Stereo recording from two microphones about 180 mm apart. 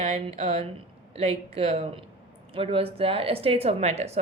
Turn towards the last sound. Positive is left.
turn(degrees=-35)  # may be behind; listen again after turning